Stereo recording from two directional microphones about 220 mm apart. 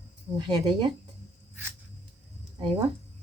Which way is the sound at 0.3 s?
20° right (ahead or behind).